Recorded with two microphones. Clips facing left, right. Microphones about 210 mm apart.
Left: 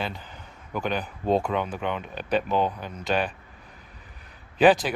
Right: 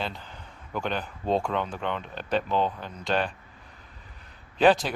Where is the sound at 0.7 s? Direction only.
5° left (ahead or behind).